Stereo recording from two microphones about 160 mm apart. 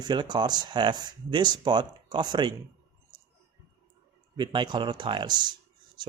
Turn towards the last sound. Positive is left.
turn(degrees=-25)  # may be behind; listen again after turning